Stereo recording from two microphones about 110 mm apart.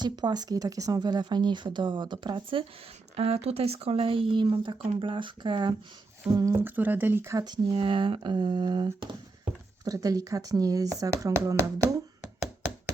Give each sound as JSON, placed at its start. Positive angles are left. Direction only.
{"t": 0.0, "sound": "speech", "side_deg": -40}
{"t": 3.2, "sound": "speech", "side_deg": -70}
{"t": 6.3, "sound": "speech", "side_deg": -25}
{"t": 7.3, "sound": "speech", "side_deg": -40}
{"t": 7.7, "sound": "speech", "side_deg": -55}
{"t": 9.8, "sound": "speech", "side_deg": -35}